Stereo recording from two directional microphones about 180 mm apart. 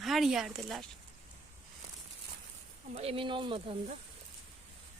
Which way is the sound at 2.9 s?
35° right (ahead or behind).